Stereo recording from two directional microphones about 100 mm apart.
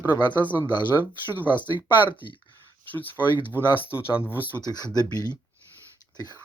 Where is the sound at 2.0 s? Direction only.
50° left (ahead or behind).